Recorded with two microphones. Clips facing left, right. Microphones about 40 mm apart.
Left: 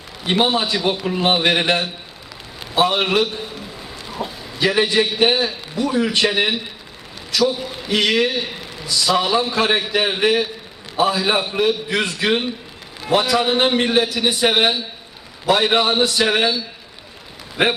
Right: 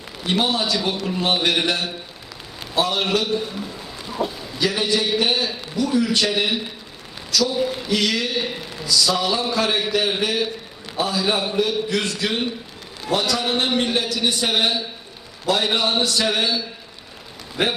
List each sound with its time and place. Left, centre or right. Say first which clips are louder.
0.3 s a man's voice: left 3 dB; left
4.0 s a sound: right 3 dB; centre
4.6 s a man's voice: left 4 dB; left
7.3 s a sound: left 4 dB; left
7.9 s a man's voice: left 4 dB; left
17.6 s a man's voice: left 4 dB; left